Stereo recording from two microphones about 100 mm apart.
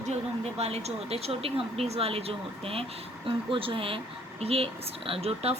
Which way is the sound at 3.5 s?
60° right (ahead or behind).